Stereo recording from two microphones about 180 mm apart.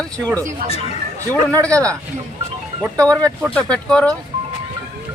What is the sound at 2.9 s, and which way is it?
Speech, 5° left (ahead or behind).